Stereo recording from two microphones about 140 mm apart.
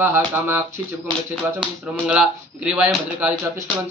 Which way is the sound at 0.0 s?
15° right (ahead or behind).